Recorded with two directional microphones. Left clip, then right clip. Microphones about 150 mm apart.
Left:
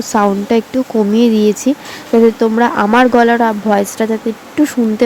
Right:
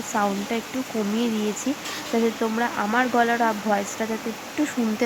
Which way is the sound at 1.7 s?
40° left (ahead or behind).